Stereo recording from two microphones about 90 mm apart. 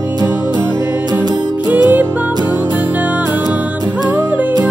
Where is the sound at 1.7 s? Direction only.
20° right (ahead or behind).